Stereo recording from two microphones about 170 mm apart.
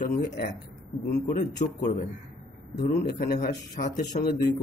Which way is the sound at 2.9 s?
60° left (ahead or behind).